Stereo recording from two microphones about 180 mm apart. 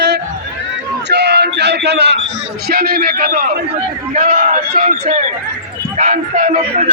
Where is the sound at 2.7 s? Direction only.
60° right (ahead or behind).